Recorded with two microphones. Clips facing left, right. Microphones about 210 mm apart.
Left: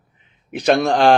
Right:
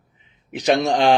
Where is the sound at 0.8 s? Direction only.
60° left (ahead or behind).